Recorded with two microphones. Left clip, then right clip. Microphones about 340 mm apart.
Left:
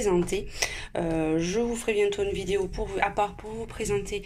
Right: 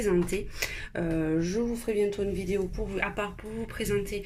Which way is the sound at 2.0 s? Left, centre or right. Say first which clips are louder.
Left 3 dB; left.